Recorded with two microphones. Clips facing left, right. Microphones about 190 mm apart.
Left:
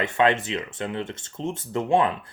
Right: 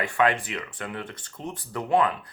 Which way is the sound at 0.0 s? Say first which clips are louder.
Left 2 dB; 25° left (ahead or behind).